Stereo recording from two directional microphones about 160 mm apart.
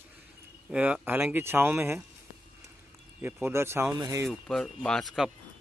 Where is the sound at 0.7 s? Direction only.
10° right (ahead or behind).